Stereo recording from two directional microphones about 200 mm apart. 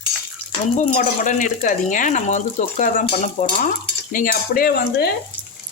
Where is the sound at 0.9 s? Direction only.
40° left (ahead or behind).